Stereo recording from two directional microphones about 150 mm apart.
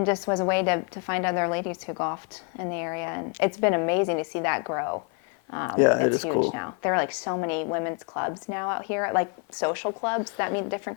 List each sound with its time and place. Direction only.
0.0 s a woman's voice: 25° left (ahead or behind)